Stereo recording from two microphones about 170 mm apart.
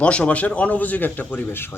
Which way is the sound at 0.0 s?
5° left (ahead or behind).